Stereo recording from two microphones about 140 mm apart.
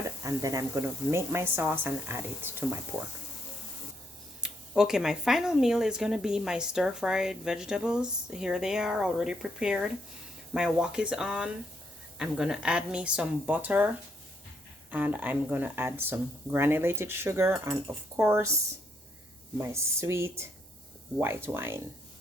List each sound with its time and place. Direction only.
0.0 s speech: 25° right (ahead or behind)
4.4 s speech: 5° right (ahead or behind)
19.5 s speech: 20° right (ahead or behind)